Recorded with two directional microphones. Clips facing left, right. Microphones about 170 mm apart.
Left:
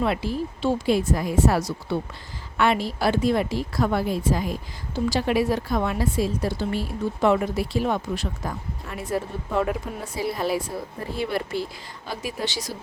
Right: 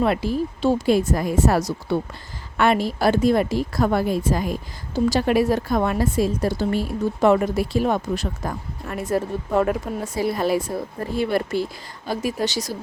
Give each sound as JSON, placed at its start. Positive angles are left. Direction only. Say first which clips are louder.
{"t": 0.0, "sound": "a woman's voice", "louder": "right 4 dB", "side_deg": -45}